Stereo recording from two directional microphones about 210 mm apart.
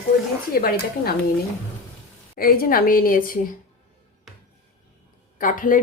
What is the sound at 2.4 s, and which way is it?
A woman's voice, 45° left (ahead or behind).